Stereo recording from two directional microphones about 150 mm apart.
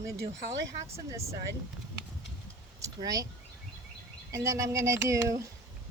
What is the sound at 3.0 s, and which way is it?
Speech, 25° right (ahead or behind).